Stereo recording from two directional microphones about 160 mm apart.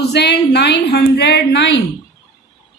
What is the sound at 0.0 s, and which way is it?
A woman's voice, 90° left.